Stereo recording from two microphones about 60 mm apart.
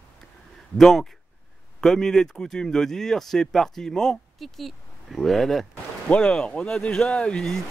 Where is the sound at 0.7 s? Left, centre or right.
Centre.